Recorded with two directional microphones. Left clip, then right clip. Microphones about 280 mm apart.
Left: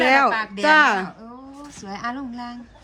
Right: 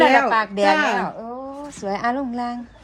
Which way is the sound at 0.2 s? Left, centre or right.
Centre.